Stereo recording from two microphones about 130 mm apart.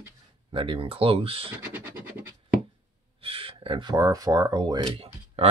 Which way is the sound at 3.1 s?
45° right (ahead or behind).